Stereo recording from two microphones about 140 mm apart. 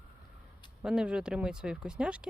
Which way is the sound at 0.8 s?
5° right (ahead or behind).